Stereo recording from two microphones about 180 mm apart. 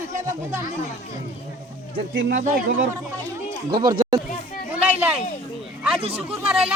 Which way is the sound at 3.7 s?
20° right (ahead or behind).